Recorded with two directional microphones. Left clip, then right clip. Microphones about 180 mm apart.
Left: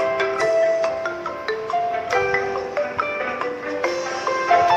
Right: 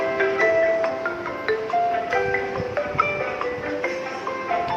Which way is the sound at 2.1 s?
40° left (ahead or behind).